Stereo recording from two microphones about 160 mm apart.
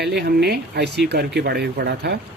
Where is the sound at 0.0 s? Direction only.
90° right.